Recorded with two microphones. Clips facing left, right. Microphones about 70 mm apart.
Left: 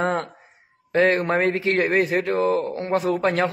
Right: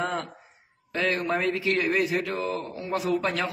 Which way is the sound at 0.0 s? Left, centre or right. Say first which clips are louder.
Left 6 dB; left.